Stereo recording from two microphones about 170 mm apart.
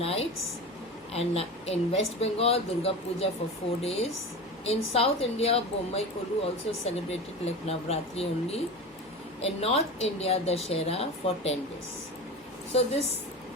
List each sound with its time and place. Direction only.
0.0 s a woman's voice: 35° left (ahead or behind)
12.7 s a woman's voice: 35° left (ahead or behind)